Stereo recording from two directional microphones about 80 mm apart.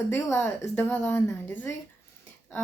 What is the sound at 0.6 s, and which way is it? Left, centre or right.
A woman's voice, left.